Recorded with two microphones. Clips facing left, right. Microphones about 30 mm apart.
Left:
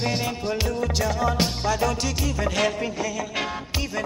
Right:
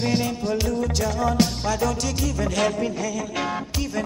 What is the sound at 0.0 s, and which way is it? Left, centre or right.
Music, centre.